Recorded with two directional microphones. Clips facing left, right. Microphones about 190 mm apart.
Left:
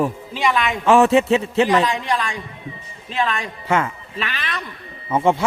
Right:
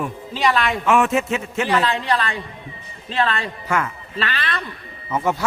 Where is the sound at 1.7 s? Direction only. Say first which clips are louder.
Left 1 dB; 15° left (ahead or behind).